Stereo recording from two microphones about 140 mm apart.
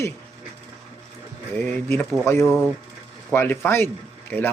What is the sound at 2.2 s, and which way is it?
A man's voice, 20° left (ahead or behind).